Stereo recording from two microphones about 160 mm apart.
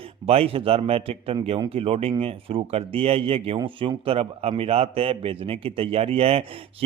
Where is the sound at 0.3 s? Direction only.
40° right (ahead or behind).